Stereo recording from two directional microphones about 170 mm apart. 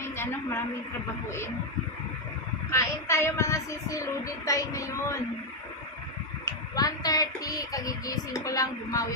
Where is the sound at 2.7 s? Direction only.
15° left (ahead or behind).